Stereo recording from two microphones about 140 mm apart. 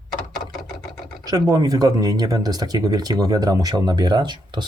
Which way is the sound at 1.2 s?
25° right (ahead or behind).